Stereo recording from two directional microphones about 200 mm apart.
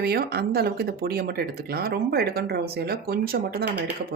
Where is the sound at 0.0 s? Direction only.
50° right (ahead or behind).